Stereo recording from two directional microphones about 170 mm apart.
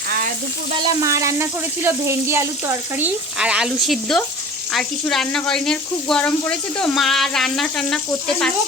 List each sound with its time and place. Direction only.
0.8 s speech: 20° right (ahead or behind)
3.3 s speech: 5° right (ahead or behind)